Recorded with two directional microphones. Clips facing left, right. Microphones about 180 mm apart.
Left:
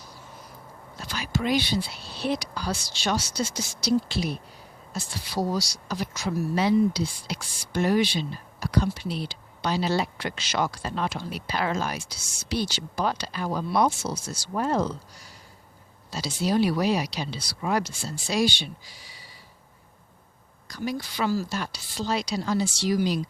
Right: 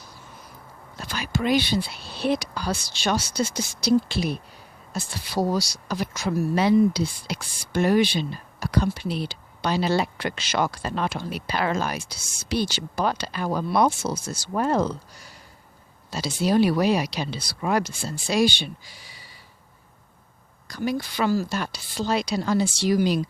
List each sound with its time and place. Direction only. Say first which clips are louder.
0.9 s speech: right 2 dB; 60° right (ahead or behind)
20.7 s speech: right 4 dB; 60° right (ahead or behind)